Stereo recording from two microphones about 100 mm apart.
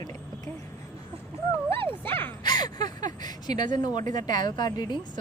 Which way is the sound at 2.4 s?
45° left (ahead or behind).